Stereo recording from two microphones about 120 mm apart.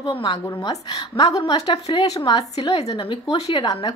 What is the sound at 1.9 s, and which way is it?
Speech, 60° left (ahead or behind).